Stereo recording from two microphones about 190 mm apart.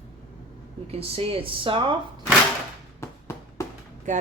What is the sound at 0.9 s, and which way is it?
Speech, 30° right (ahead or behind).